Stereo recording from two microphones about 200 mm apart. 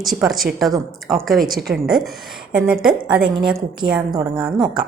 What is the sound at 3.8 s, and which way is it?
Speech, 5° right (ahead or behind).